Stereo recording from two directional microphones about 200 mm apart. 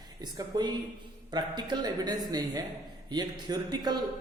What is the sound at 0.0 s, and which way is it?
Speech, 20° right (ahead or behind).